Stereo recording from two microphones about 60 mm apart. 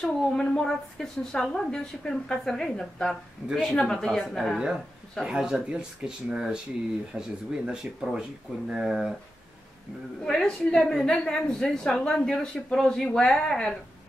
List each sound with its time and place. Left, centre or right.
0.0 s a woman's voice: centre
3.4 s speech: right
3.7 s a woman's voice: centre
5.2 s speech: centre
10.2 s a woman's voice: centre